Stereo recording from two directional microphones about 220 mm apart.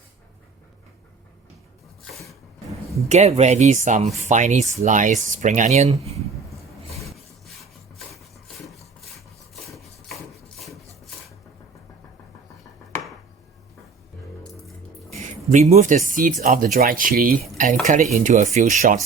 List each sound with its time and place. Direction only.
3.1 s speech: 30° right (ahead or behind)
7.1 s rub: centre (ahead or behind)
8.6 s filing: centre (ahead or behind)
10.6 s a sound: centre (ahead or behind)
15.4 s speech: 30° right (ahead or behind)